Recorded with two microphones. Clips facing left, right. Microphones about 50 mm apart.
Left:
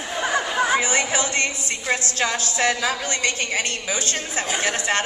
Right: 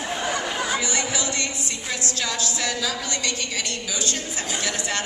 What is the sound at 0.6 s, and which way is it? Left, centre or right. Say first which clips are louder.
Music: left 5 dB; left.